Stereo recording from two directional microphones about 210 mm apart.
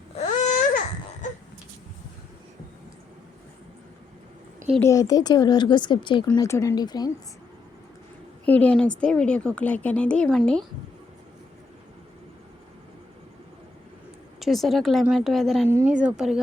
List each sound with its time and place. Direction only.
0.2 s baby cry: 35° left (ahead or behind)
4.8 s a woman's voice: 15° left (ahead or behind)
8.4 s a woman's voice: 5° left (ahead or behind)
14.4 s a woman's voice: centre (ahead or behind)